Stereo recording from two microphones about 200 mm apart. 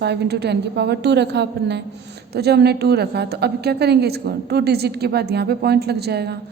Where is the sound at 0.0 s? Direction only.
55° right (ahead or behind).